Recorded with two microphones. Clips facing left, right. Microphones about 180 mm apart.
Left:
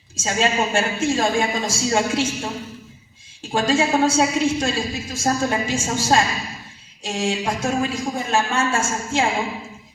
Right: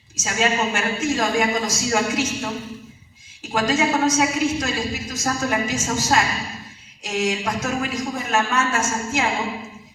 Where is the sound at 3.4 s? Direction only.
30° left (ahead or behind).